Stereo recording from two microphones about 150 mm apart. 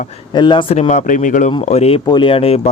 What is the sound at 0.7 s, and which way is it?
Speech, 50° left (ahead or behind).